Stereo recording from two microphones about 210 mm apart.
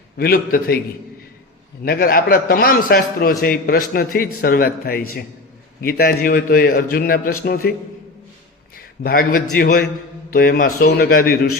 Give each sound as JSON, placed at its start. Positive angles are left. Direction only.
{"t": 0.2, "sound": "a man's voice", "side_deg": 45}
{"t": 1.8, "sound": "a man's voice", "side_deg": 45}
{"t": 8.7, "sound": "a man's voice", "side_deg": 45}